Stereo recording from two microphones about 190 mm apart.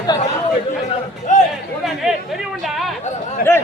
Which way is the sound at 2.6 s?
Centre (ahead or behind).